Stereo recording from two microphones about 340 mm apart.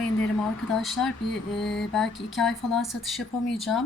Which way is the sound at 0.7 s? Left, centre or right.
Centre.